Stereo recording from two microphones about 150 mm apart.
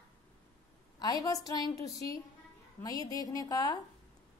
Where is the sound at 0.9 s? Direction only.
25° left (ahead or behind).